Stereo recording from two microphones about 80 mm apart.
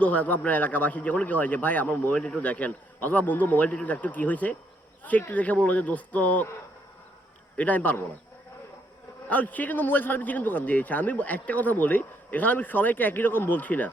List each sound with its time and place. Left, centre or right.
0.0 s a man's voice: centre
7.5 s a man's voice: centre
9.3 s a man's voice: left